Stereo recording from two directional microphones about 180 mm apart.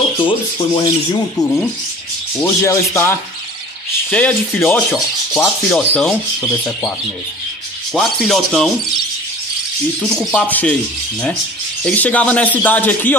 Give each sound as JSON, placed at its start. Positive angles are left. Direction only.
{"t": 0.2, "sound": "speech", "side_deg": 30}
{"t": 2.4, "sound": "rub", "side_deg": 15}
{"t": 7.9, "sound": "speech", "side_deg": 0}
{"t": 10.0, "sound": "speech", "side_deg": 0}
{"t": 10.5, "sound": "rub", "side_deg": 10}
{"t": 11.8, "sound": "rub", "side_deg": 10}